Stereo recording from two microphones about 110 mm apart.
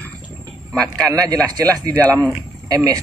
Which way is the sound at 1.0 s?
30° right (ahead or behind).